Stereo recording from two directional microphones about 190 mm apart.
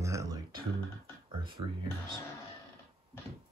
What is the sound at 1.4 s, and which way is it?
Speech, 25° right (ahead or behind).